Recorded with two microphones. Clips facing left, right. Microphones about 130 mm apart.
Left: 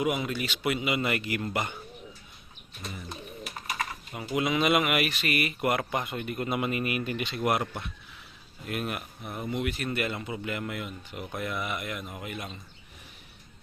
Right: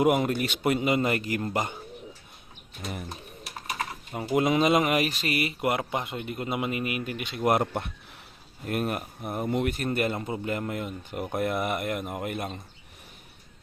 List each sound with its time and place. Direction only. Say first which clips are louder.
0.0 s speech: right 6 dB; 50° right (ahead or behind); by 1.7 s 35° right (ahead or behind)
2.9 s bird: right 5 dB; 55° right (ahead or behind)
4.4 s speech: right 3 dB; 40° right (ahead or behind)
5.4 s speech: right 1 dB; 25° right (ahead or behind)
7.4 s speech: right 5 dB; 40° right (ahead or behind)